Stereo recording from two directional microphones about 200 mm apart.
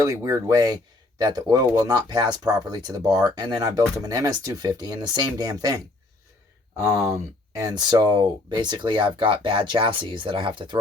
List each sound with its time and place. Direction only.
0.0 s speech: 15° right (ahead or behind)
7.5 s speech: 20° right (ahead or behind)